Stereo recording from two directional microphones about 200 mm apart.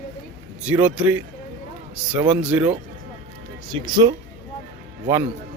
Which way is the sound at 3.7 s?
20° right (ahead or behind).